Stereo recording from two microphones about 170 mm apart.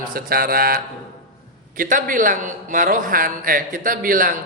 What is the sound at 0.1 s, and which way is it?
A man's voice, 60° right (ahead or behind).